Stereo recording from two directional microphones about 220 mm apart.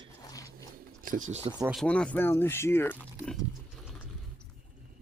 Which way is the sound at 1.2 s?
30° right (ahead or behind).